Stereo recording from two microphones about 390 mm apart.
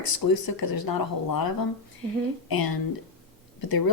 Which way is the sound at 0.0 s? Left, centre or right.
Left.